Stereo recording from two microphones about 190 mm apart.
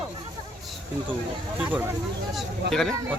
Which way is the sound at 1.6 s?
5° right (ahead or behind).